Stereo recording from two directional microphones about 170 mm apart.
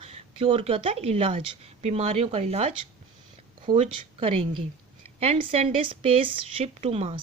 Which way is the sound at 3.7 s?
35° right (ahead or behind).